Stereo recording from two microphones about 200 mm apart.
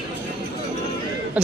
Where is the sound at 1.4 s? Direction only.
5° right (ahead or behind).